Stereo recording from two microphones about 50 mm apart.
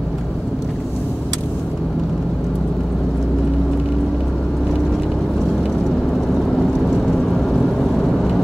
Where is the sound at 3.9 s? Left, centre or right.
Centre.